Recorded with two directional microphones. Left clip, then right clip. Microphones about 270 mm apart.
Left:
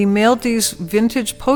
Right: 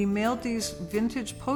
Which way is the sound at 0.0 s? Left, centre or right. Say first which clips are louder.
Left 13 dB; left.